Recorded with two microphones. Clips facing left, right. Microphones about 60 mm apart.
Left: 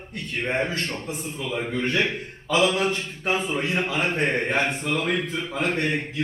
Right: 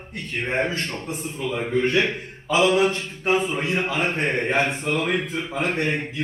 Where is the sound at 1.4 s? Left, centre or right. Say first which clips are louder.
Right 4 dB; centre.